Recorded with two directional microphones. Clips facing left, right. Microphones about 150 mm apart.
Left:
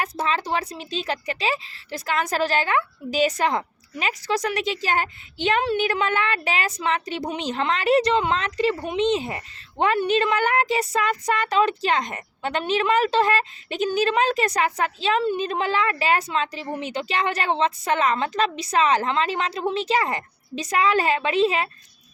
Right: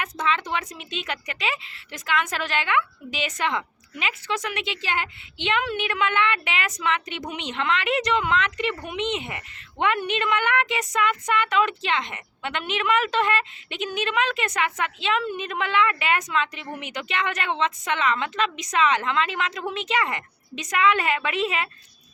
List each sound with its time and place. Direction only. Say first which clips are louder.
0.0 s speech: left 1 dB; 35° left (ahead or behind)